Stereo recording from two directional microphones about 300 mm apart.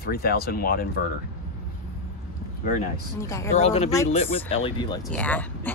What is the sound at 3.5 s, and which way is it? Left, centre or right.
Speech, left.